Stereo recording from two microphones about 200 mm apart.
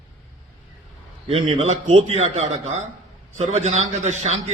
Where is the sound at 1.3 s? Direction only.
35° right (ahead or behind).